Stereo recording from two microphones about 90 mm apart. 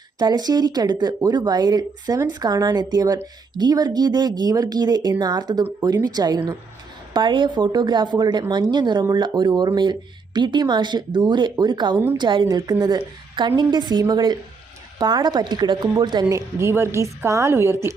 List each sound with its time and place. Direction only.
0.2 s speech: 50° right (ahead or behind)
7.1 s speech: 60° right (ahead or behind)
13.6 s speech: 55° right (ahead or behind)
16.3 s a woman's voice: 30° right (ahead or behind)